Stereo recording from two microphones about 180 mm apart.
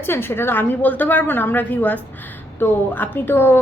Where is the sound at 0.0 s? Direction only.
10° left (ahead or behind).